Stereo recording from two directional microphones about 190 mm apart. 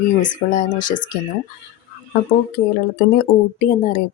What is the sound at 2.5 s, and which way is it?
A woman's voice, 55° left (ahead or behind).